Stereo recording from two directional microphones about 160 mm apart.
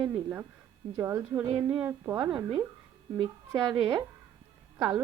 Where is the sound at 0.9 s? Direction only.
15° right (ahead or behind).